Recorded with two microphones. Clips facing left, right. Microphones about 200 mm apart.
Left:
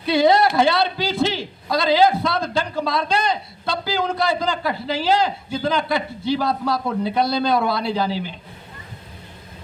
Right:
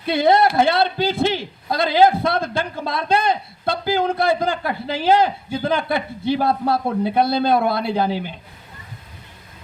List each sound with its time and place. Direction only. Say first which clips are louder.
0.0 s a man's voice: even; 55° right (ahead or behind)